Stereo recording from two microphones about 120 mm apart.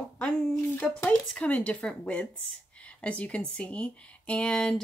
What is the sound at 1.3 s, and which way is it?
Speech, 10° left (ahead or behind).